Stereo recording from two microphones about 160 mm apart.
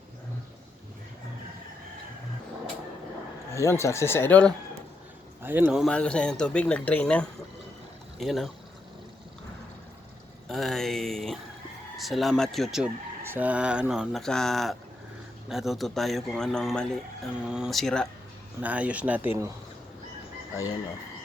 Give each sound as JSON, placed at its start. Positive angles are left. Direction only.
{"t": 3.5, "sound": "speech", "side_deg": 20}
{"t": 5.4, "sound": "speech", "side_deg": -10}
{"t": 5.8, "sound": "speech", "side_deg": 5}
{"t": 10.5, "sound": "speech", "side_deg": 0}
{"t": 13.2, "sound": "speech", "side_deg": -10}
{"t": 18.6, "sound": "speech", "side_deg": -10}